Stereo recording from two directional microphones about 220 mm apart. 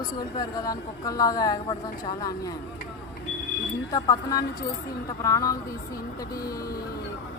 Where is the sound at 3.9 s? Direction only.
15° left (ahead or behind).